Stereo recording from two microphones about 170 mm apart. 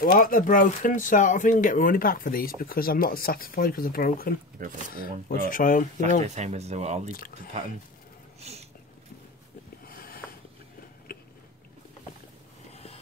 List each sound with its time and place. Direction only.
0.0 s speech: 55° left (ahead or behind)
4.6 s speech: 55° right (ahead or behind)
4.9 s speech: 55° left (ahead or behind)
6.2 s speech: 40° right (ahead or behind)
7.1 s speech: 55° left (ahead or behind)
8.4 s a sound: 40° right (ahead or behind)
9.8 s a sound: 60° left (ahead or behind)
11.1 s biting: 60° left (ahead or behind)
12.7 s a sound: 35° left (ahead or behind)